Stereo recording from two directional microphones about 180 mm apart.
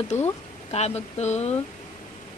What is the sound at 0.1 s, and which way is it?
Speech, 40° left (ahead or behind).